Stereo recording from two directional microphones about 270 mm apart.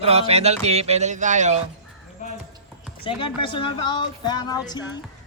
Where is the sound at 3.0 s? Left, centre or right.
Centre.